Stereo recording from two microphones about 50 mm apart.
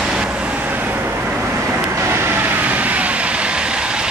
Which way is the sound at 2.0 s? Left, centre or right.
Right.